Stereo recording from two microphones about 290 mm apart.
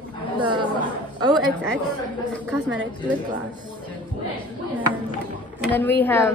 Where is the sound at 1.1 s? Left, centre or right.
Centre.